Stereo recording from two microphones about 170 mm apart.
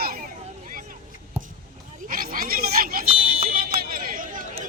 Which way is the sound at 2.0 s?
55° right (ahead or behind).